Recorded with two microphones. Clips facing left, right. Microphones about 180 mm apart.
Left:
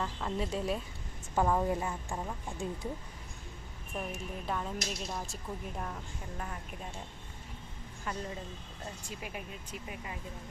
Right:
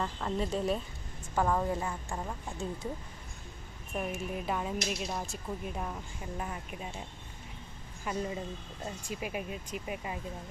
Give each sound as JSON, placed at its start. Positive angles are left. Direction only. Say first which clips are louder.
{"t": 0.0, "sound": "a woman's voice", "louder": "right 2 dB", "side_deg": 0}
{"t": 2.0, "sound": "a woman's voice", "louder": "even", "side_deg": 0}
{"t": 3.9, "sound": "a woman's voice", "louder": "right 4 dB", "side_deg": -5}
{"t": 8.0, "sound": "speech", "louder": "right 4 dB", "side_deg": -15}